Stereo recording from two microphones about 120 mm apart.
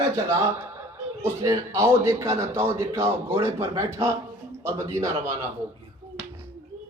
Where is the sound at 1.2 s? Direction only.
25° right (ahead or behind).